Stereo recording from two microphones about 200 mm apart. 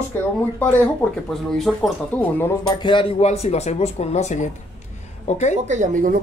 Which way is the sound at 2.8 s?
25° left (ahead or behind).